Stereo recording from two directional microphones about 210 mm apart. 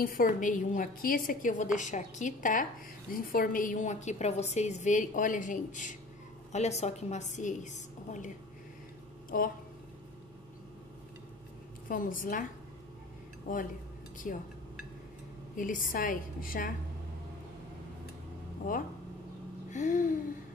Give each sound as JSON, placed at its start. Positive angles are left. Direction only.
{"t": 0.0, "sound": "a woman's voice", "side_deg": 40}
{"t": 9.3, "sound": "speech", "side_deg": 40}
{"t": 11.9, "sound": "a woman's voice", "side_deg": 40}
{"t": 14.1, "sound": "speech", "side_deg": 40}
{"t": 15.5, "sound": "a woman's voice", "side_deg": 40}
{"t": 19.7, "sound": "a sound", "side_deg": 35}